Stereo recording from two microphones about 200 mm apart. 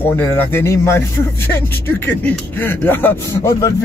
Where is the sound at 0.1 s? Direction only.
10° left (ahead or behind).